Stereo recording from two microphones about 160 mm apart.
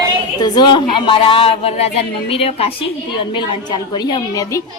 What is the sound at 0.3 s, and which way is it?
A woman's voice, 25° left (ahead or behind).